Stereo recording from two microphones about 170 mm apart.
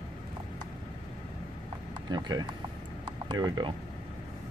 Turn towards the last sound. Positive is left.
turn(degrees=-25)  # may be behind; listen again after turning